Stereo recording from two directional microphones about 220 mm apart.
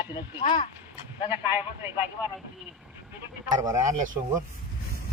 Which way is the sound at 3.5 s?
15° right (ahead or behind).